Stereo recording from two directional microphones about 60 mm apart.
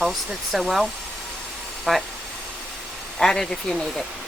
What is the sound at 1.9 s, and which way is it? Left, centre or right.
Speech, centre.